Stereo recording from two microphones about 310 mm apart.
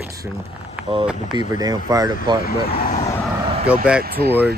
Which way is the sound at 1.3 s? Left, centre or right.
Centre.